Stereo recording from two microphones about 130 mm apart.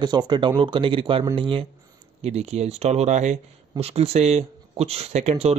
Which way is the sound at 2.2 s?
55° right (ahead or behind).